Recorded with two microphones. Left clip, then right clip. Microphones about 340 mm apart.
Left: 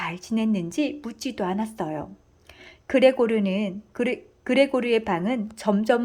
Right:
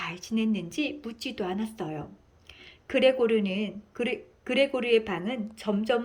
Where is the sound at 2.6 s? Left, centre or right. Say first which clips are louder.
Left 5 dB; centre.